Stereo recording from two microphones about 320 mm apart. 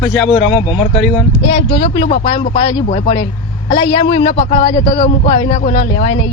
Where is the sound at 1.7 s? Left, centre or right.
Centre.